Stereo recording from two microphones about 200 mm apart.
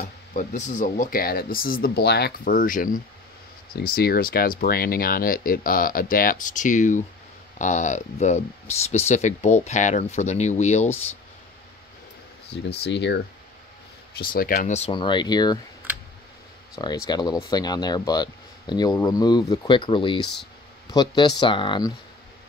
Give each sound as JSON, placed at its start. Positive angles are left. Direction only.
{"t": 0.3, "sound": "speech", "side_deg": 40}
{"t": 12.8, "sound": "speech", "side_deg": 60}
{"t": 14.1, "sound": "speech", "side_deg": 45}
{"t": 16.7, "sound": "speech", "side_deg": 15}